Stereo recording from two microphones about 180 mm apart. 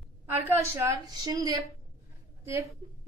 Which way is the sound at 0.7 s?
20° right (ahead or behind).